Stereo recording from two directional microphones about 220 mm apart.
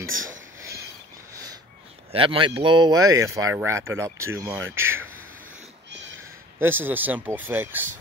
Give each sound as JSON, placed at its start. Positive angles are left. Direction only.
{"t": 0.0, "sound": "speech", "side_deg": -65}
{"t": 2.1, "sound": "speech", "side_deg": -25}
{"t": 6.6, "sound": "speech", "side_deg": -10}